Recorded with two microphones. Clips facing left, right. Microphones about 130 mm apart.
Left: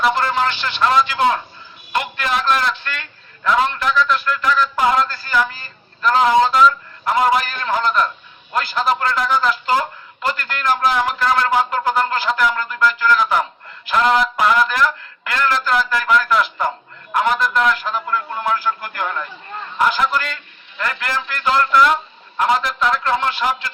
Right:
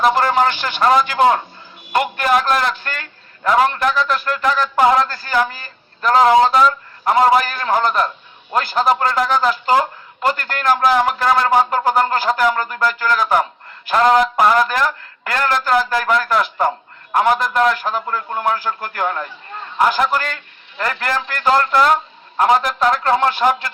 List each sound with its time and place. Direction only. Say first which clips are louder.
0.0 s a man's voice: right 3 dB; 45° right (ahead or behind)